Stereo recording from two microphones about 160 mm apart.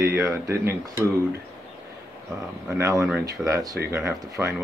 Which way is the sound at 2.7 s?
20° right (ahead or behind).